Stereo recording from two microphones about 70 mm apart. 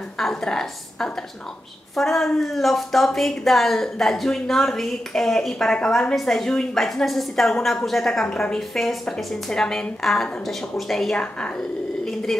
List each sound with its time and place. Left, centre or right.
0.2 s a woman's voice: centre